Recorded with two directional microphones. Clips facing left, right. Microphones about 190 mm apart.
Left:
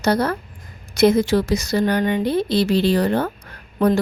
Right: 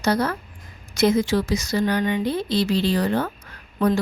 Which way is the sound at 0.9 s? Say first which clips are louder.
Left 4 dB; 60° left (ahead or behind).